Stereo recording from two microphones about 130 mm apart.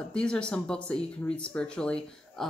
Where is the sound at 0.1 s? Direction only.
5° left (ahead or behind).